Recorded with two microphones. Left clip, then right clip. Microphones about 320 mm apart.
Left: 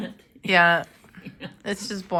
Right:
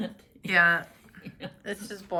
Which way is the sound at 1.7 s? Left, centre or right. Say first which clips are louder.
Left 7 dB; centre.